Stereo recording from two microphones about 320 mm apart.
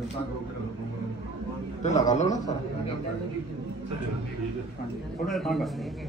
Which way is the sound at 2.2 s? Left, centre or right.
Centre.